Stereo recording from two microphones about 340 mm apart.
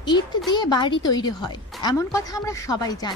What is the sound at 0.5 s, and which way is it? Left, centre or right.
A woman's voice, centre.